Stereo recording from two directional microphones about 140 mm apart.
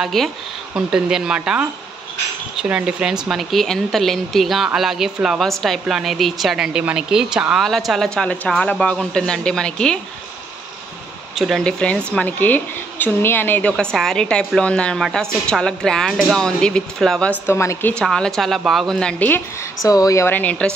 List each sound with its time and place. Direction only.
0.0 s a woman's voice: centre (ahead or behind)
11.3 s a woman's voice: centre (ahead or behind); by 17.9 s 20° left (ahead or behind)
17.9 s a woman's voice: 5° left (ahead or behind)
19.9 s speech: 25° left (ahead or behind); by 20.7 s 10° left (ahead or behind)